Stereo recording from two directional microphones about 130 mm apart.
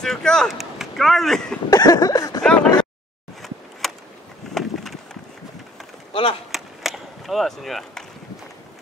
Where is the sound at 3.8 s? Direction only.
Centre (ahead or behind).